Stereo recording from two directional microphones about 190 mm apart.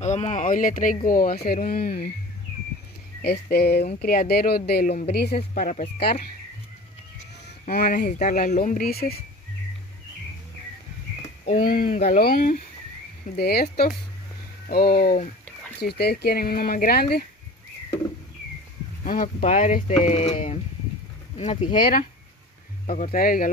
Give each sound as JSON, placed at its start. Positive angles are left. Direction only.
{"t": 0.0, "sound": "speech", "side_deg": 40}
{"t": 3.2, "sound": "speech", "side_deg": 55}
{"t": 4.8, "sound": "speech", "side_deg": 35}
{"t": 5.1, "sound": "speech", "side_deg": 55}
{"t": 7.6, "sound": "speech", "side_deg": 45}
{"t": 11.2, "sound": "a sound", "side_deg": 35}
{"t": 11.6, "sound": "speech", "side_deg": 45}
{"t": 19.0, "sound": "speech", "side_deg": 45}
{"t": 22.8, "sound": "speech", "side_deg": 30}
{"t": 23.1, "sound": "speech", "side_deg": 50}